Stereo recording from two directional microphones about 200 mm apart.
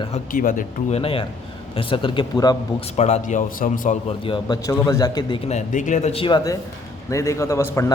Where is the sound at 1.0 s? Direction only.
25° left (ahead or behind).